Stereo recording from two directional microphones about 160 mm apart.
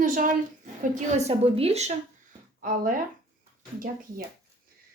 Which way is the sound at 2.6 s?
60° right (ahead or behind).